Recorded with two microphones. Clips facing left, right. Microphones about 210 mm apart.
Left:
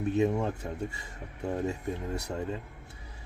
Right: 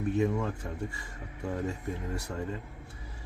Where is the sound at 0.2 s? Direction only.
20° left (ahead or behind).